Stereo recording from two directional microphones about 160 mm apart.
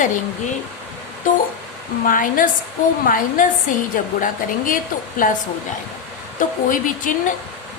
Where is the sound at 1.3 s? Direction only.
60° left (ahead or behind).